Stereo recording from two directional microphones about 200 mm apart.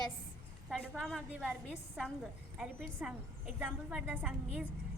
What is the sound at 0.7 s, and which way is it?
A woman's voice, centre (ahead or behind).